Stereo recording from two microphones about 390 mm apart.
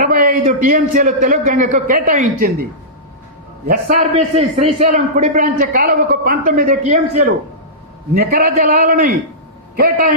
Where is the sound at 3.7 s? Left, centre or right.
Centre.